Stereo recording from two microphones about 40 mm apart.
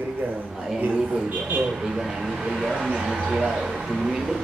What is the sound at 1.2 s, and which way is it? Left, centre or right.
Speech, right.